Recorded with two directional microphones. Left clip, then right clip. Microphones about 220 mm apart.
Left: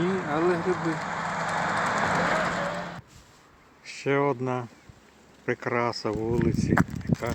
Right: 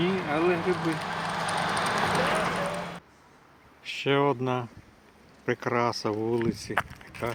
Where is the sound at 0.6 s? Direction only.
45° right (ahead or behind).